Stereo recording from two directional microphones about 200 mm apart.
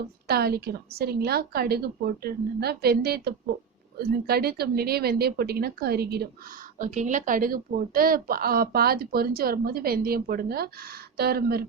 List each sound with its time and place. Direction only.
0.3 s speech: 50° right (ahead or behind)